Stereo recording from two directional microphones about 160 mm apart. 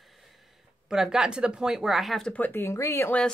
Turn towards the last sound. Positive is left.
turn(degrees=10)  # may be behind; listen again after turning